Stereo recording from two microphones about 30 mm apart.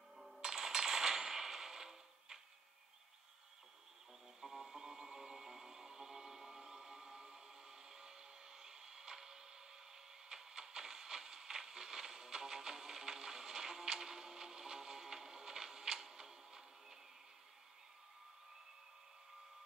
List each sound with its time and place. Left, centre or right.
0.4 s coin: centre
4.4 s a sound: centre
16.0 s music: centre